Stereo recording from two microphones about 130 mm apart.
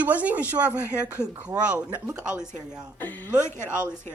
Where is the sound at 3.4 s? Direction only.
20° left (ahead or behind).